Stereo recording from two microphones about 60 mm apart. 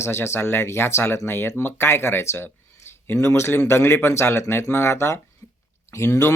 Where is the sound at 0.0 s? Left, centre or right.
Left.